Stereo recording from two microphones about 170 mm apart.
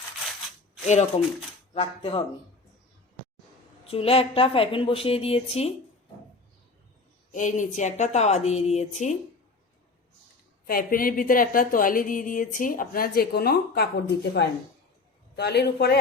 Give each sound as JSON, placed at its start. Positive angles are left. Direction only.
{"t": 0.9, "sound": "a woman's voice", "side_deg": 40}
{"t": 3.8, "sound": "a woman's voice", "side_deg": 35}
{"t": 7.3, "sound": "a woman's voice", "side_deg": 50}
{"t": 10.7, "sound": "a man's voice", "side_deg": 55}